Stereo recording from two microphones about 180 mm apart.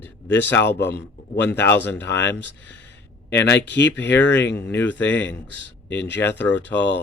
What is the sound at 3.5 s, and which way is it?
Speech, 80° left.